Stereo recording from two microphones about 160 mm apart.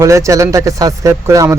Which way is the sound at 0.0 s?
20° right (ahead or behind).